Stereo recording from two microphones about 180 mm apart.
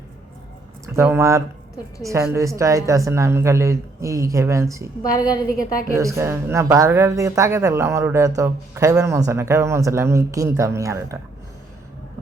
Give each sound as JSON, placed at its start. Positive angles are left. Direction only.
{"t": 0.9, "sound": "speech", "side_deg": -15}
{"t": 5.1, "sound": "a woman's voice", "side_deg": 20}
{"t": 5.9, "sound": "speech", "side_deg": -15}